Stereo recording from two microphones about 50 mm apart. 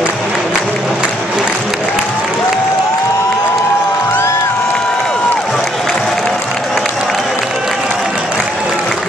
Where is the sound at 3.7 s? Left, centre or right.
Left.